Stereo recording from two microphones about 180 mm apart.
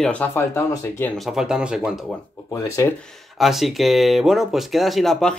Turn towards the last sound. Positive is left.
turn(degrees=0)  # may be behind; listen again after turning